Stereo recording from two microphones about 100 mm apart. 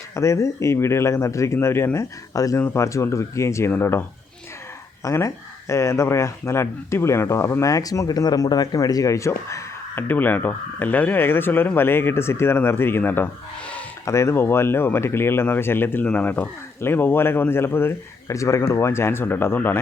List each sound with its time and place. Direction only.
0.2 s speech: 30° left (ahead or behind)
5.0 s speech: 30° left (ahead or behind)
14.0 s speech: 30° left (ahead or behind)